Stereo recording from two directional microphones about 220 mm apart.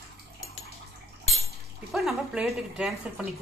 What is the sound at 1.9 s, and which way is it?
A woman's voice, centre (ahead or behind).